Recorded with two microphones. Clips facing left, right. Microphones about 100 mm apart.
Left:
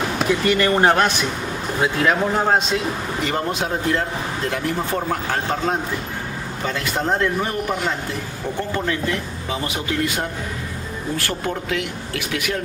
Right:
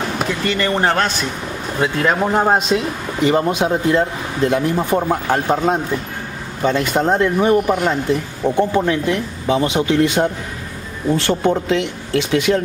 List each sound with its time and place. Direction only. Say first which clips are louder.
0.3 s speech: left 3 dB; 10° left (ahead or behind)
2.3 s a man's voice: right 4 dB; 15° right (ahead or behind)